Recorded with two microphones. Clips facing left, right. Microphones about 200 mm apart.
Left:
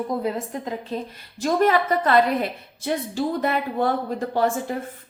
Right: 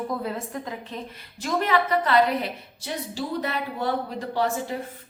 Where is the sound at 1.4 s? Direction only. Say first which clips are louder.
Left 4 dB; 45° left (ahead or behind).